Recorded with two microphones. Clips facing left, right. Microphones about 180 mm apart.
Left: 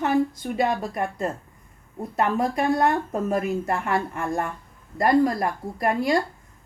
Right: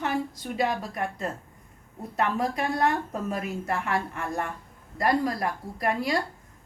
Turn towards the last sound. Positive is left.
turn(degrees=50)  # may be behind; listen again after turning